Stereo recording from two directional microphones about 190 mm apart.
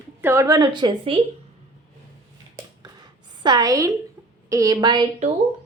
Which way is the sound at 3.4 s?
20° right (ahead or behind).